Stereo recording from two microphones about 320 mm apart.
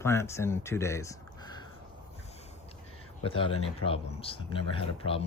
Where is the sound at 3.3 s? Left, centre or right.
Centre.